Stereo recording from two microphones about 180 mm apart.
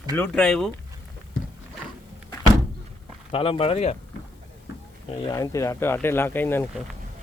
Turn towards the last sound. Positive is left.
turn(degrees=10)  # may be behind; listen again after turning